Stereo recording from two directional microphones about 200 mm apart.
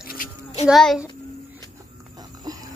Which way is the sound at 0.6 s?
Centre (ahead or behind).